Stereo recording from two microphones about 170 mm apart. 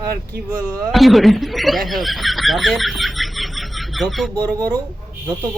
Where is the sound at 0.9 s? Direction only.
Centre (ahead or behind).